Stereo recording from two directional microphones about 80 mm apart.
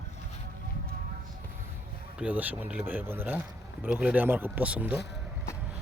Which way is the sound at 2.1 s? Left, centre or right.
Centre.